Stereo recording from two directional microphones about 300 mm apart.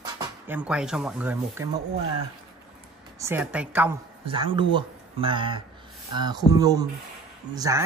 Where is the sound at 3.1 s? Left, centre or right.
Centre.